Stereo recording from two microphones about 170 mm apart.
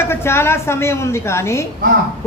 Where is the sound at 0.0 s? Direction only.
15° left (ahead or behind).